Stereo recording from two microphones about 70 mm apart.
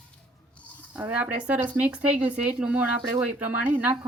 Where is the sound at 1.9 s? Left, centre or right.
Right.